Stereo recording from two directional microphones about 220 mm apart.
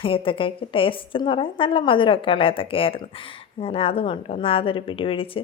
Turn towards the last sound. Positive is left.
turn(degrees=25)  # may be behind; listen again after turning